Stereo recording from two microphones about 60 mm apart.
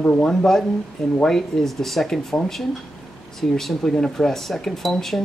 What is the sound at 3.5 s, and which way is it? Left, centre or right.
Speech, centre.